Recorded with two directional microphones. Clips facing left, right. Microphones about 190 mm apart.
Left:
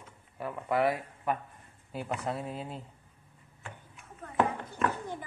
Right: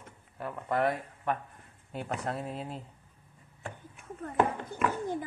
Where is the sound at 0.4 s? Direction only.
5° left (ahead or behind).